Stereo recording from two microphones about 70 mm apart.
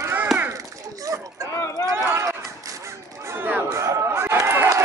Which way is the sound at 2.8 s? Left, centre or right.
Right.